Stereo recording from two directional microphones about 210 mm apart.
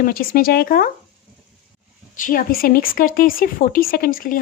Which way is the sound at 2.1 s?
40° left (ahead or behind).